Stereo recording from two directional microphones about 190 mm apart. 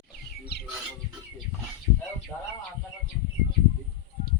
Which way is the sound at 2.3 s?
15° left (ahead or behind).